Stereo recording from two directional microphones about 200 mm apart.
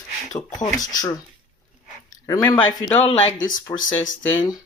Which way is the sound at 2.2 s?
15° left (ahead or behind).